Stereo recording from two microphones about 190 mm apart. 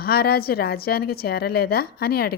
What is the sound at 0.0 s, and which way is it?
A woman's voice, 55° left (ahead or behind).